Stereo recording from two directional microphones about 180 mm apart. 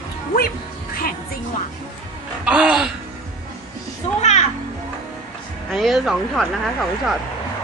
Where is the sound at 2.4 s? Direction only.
5° right (ahead or behind).